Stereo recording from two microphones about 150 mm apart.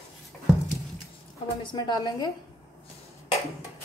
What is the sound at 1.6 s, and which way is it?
Speech, 30° left (ahead or behind).